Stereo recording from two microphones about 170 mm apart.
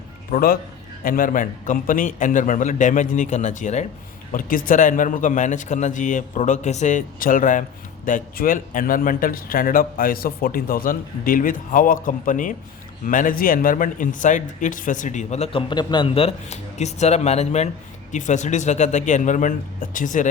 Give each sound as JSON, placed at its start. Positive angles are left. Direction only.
{"t": 0.3, "sound": "speech", "side_deg": 60}
{"t": 15.7, "sound": "speech", "side_deg": 25}